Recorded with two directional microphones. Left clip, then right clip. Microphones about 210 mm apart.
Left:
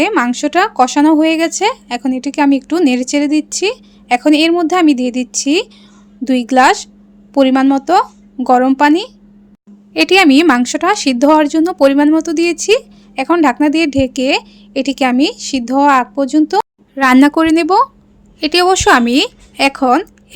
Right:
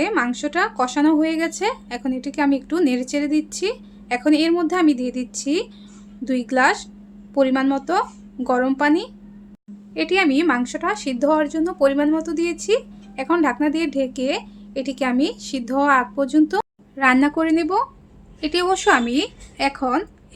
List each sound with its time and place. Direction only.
0.0 s speech: 40° left (ahead or behind)
9.9 s speech: 50° left (ahead or behind); by 16.6 s 30° left (ahead or behind)
16.9 s a woman's voice: 50° left (ahead or behind)